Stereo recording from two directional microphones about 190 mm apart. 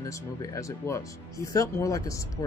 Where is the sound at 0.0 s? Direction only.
20° left (ahead or behind).